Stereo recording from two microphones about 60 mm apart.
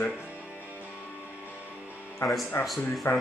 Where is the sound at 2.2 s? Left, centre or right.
Left.